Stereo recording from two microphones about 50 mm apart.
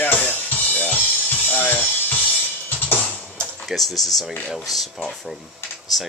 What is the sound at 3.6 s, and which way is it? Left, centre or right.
Speech, centre.